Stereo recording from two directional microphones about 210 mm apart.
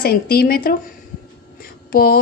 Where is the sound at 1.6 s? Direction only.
45° left (ahead or behind).